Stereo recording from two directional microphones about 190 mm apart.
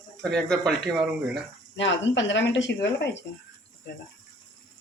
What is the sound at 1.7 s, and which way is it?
Speech, 75° left (ahead or behind).